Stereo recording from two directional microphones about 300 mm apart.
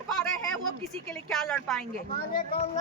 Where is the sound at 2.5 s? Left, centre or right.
Centre.